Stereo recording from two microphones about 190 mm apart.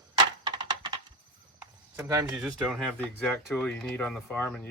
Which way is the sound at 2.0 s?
15° right (ahead or behind).